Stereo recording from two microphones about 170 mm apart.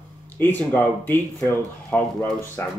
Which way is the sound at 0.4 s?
10° left (ahead or behind).